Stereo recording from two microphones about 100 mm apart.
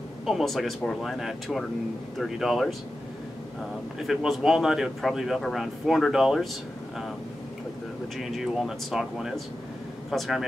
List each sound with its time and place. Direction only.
0.2 s speech: centre (ahead or behind)
4.0 s speech: centre (ahead or behind)
8.2 s speech: 5° right (ahead or behind)